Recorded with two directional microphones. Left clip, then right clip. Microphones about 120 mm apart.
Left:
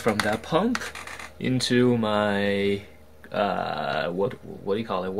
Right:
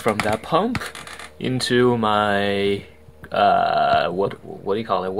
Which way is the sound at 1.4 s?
40° right (ahead or behind).